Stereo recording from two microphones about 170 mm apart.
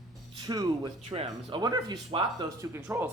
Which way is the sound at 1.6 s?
25° right (ahead or behind).